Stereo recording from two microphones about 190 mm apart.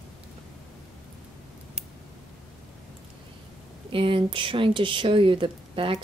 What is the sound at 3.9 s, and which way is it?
Speech, 25° right (ahead or behind).